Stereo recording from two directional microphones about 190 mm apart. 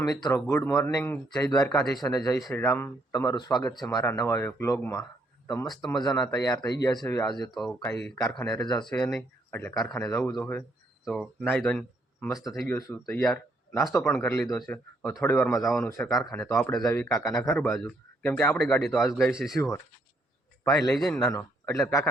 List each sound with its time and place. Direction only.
0.0 s speech: 20° left (ahead or behind)
7.5 s speech: centre (ahead or behind)
8.6 s speech: 20° left (ahead or behind)
9.0 s speech: 10° left (ahead or behind)
11.0 s speech: centre (ahead or behind)
16.3 s speech: 15° left (ahead or behind)
20.9 s speech: 5° left (ahead or behind)
21.3 s a man's voice: 15° left (ahead or behind)